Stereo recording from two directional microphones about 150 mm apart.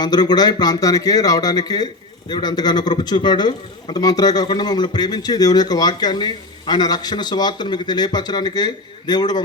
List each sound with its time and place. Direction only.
0.0 s a man's voice: 30° left (ahead or behind)